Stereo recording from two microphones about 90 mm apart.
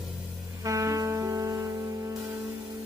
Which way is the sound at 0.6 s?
40° right (ahead or behind).